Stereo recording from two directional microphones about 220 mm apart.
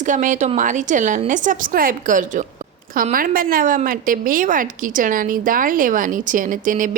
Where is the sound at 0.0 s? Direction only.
35° right (ahead or behind).